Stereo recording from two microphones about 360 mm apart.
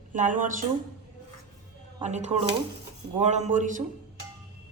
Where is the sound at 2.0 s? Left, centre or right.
Centre.